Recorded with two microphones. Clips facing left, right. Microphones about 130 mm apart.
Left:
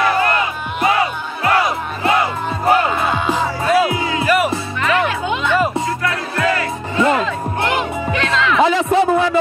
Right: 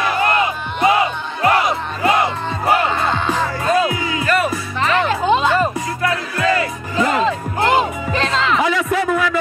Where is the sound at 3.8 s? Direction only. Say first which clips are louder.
Left 2 dB; 30° left (ahead or behind).